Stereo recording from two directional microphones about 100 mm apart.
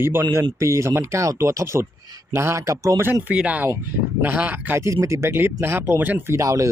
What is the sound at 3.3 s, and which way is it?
Speech, 15° right (ahead or behind).